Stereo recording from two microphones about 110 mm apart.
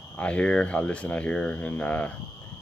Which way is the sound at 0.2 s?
10° left (ahead or behind).